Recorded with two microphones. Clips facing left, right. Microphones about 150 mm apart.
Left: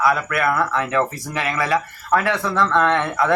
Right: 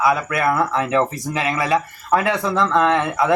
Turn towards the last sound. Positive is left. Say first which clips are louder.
# right 1 dB
turn(degrees=-10)  # may be behind; listen again after turning